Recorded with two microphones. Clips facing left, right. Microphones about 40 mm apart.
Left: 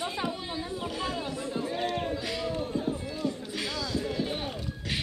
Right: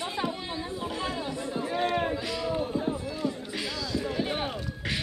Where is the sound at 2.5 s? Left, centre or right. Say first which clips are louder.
Right 2 dB; centre.